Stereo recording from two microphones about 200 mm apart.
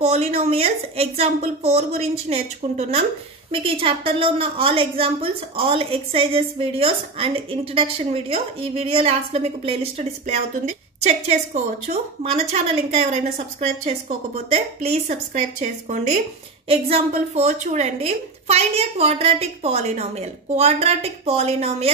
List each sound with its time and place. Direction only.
0.0 s a woman's voice: 30° right (ahead or behind)